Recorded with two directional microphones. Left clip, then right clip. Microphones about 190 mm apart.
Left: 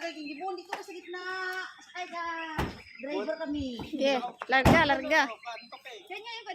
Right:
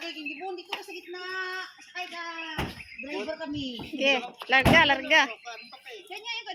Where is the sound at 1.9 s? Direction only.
25° right (ahead or behind).